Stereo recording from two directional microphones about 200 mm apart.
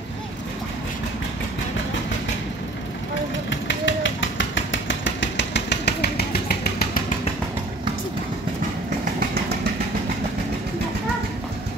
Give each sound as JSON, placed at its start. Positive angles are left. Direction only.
{"t": 3.4, "sound": "vehicle", "side_deg": 65}